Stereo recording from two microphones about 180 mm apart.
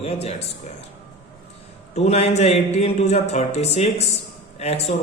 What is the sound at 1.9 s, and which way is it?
A man's voice, 40° left (ahead or behind).